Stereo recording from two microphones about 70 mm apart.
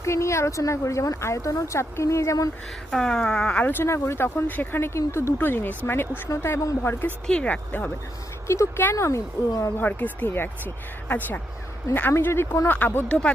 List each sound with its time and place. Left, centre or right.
0.0 s speech: left
2.9 s speech: centre; by 3.8 s left
3.8 s speech: left
4.9 s speech: left
5.4 s speech: left
7.3 s speech: centre
8.4 s speech: left
9.7 s speech: left
11.9 s speech: left
13.1 s speech: centre